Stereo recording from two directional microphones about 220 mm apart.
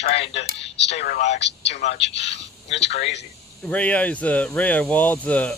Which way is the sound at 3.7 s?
5° left (ahead or behind).